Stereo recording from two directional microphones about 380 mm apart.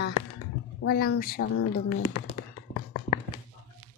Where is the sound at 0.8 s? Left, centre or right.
Left.